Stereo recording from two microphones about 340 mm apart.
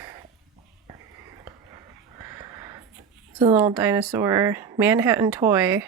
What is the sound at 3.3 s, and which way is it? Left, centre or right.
Speech, centre.